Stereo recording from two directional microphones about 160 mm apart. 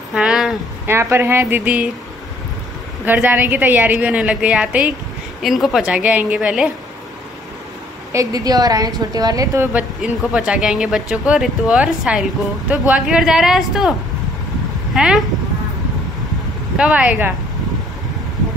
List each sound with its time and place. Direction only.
0.1 s a sound: 5° right (ahead or behind)
0.8 s speech: 15° right (ahead or behind)
3.1 s a woman's voice: 10° right (ahead or behind)
8.1 s a woman's voice: 20° right (ahead or behind); by 13.9 s 5° right (ahead or behind)
15.0 s a woman's voice: 5° right (ahead or behind)
16.7 s speech: 5° right (ahead or behind)